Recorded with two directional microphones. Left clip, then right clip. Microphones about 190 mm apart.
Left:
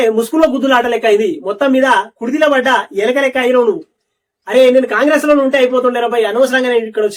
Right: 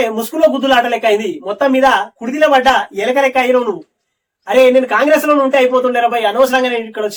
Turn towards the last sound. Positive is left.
turn(degrees=-5)  # may be behind; listen again after turning